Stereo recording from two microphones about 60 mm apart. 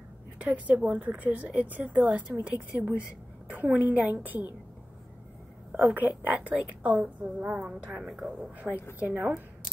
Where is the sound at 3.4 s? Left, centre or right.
Right.